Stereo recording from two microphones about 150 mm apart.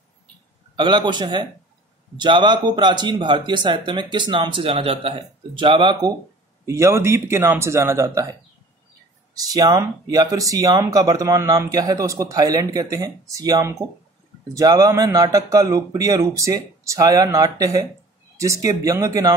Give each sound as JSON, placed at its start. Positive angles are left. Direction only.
{"t": 0.7, "sound": "speech", "side_deg": -30}
{"t": 6.6, "sound": "speech", "side_deg": -20}
{"t": 9.3, "sound": "speech", "side_deg": -25}